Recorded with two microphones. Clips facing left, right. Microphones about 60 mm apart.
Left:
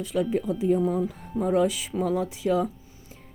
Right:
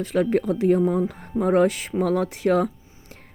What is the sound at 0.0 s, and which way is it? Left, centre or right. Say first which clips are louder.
Speech: right 4 dB; right.